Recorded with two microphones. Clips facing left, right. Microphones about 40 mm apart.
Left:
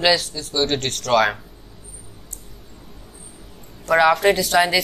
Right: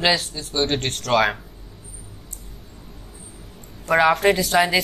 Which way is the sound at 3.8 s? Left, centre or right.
Right.